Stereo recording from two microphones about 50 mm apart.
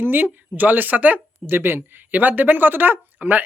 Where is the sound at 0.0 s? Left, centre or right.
Right.